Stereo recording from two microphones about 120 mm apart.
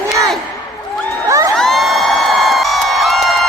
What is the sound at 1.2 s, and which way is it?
Crowd, 25° right (ahead or behind).